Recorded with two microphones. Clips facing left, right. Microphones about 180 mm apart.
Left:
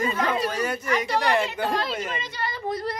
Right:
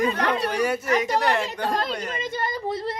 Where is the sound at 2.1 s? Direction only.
50° right (ahead or behind).